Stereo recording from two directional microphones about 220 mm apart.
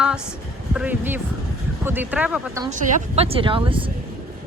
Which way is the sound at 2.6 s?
35° right (ahead or behind).